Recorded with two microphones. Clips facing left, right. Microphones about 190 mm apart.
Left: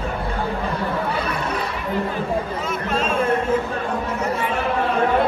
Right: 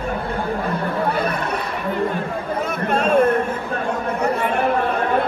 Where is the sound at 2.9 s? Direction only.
60° right (ahead or behind).